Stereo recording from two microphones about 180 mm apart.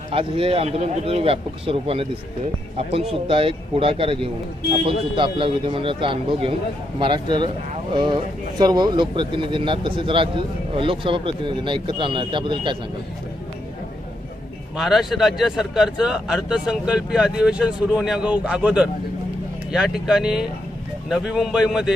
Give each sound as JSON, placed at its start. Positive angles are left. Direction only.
{"t": 0.1, "sound": "speech", "side_deg": -30}
{"t": 14.8, "sound": "speech", "side_deg": 0}